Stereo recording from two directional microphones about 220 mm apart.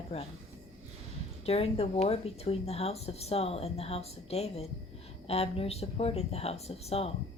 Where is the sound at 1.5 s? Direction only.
25° left (ahead or behind).